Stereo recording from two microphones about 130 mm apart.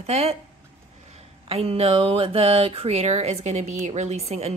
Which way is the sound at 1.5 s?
50° right (ahead or behind).